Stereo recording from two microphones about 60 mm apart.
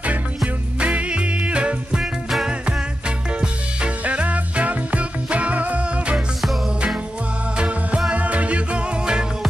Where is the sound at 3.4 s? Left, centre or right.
Centre.